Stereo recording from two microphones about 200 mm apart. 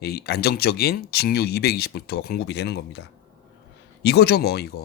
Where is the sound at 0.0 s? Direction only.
55° left (ahead or behind).